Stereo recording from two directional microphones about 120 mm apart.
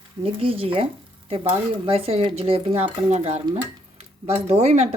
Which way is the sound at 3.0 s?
65° right (ahead or behind).